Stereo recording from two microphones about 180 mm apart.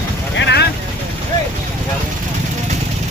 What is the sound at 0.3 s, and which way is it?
Vehicle, 70° left (ahead or behind).